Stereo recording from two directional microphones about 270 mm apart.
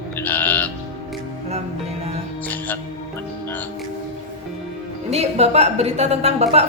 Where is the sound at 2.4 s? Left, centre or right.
Centre.